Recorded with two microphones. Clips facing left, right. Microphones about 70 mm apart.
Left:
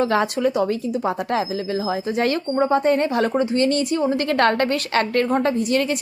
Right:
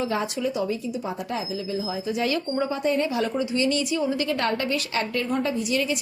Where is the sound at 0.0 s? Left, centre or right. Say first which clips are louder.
Left 7 dB; left.